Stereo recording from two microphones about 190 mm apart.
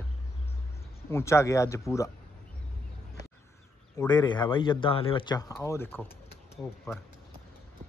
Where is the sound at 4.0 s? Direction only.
20° left (ahead or behind).